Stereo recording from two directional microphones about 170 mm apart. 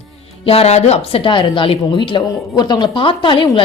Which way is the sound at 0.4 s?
35° left (ahead or behind).